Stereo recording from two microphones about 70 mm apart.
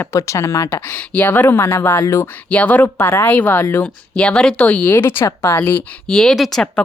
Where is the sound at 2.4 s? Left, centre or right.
Centre.